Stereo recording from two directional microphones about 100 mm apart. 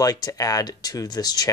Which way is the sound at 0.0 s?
40° left (ahead or behind).